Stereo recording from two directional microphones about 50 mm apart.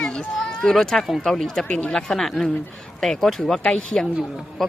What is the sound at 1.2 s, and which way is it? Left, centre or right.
Speech, centre.